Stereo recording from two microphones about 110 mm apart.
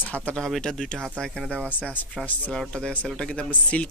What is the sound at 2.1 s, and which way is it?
Speech, 5° left (ahead or behind).